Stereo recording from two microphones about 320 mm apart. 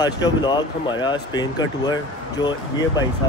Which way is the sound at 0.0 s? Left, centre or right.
Centre.